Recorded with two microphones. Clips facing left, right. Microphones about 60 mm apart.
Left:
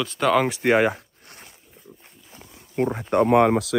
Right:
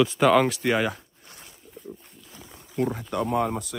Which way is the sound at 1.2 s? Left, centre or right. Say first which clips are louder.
Left 2 dB; left.